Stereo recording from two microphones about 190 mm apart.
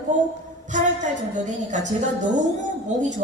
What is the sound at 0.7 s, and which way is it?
A woman's voice, 40° right (ahead or behind).